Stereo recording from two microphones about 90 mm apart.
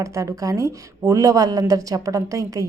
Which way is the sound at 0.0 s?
35° right (ahead or behind).